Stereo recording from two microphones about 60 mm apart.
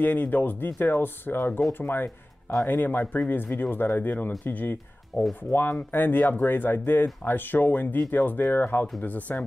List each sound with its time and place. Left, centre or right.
0.0 s speech: left
5.1 s speech: left
5.5 s speech: left